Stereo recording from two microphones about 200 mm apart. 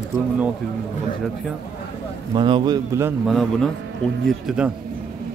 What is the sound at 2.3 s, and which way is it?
Speech, 25° right (ahead or behind).